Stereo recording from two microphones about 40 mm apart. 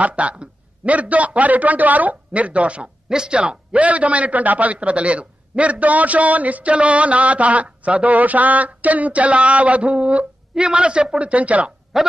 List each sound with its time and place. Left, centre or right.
0.0 s a man's voice: right
3.1 s speech: centre
3.3 s a man's voice: right
11.9 s a sound: centre